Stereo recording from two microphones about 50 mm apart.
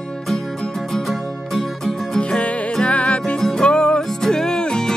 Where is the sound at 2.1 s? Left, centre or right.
Centre.